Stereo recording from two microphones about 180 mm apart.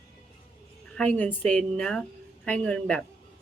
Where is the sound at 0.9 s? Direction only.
10° left (ahead or behind).